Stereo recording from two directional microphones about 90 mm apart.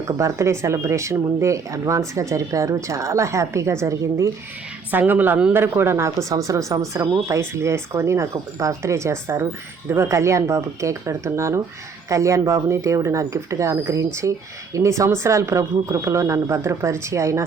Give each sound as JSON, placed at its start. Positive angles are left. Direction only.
{"t": 0.2, "sound": "speech", "side_deg": -35}
{"t": 4.9, "sound": "speech", "side_deg": -20}